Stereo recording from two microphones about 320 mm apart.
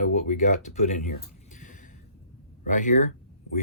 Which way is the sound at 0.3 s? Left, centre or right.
Left.